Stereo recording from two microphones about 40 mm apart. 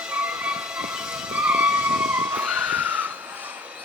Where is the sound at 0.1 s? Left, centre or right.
Right.